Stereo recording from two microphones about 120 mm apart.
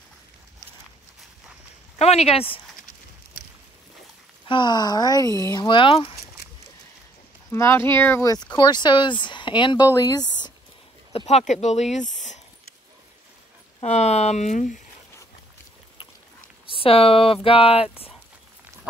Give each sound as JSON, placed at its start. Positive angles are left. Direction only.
{"t": 2.0, "sound": "speech", "side_deg": 60}
{"t": 4.5, "sound": "speech", "side_deg": 40}
{"t": 7.5, "sound": "speech", "side_deg": 20}
{"t": 9.8, "sound": "speech", "side_deg": 25}
{"t": 11.1, "sound": "speech", "side_deg": 65}
{"t": 13.8, "sound": "speech", "side_deg": 65}
{"t": 16.6, "sound": "speech", "side_deg": 50}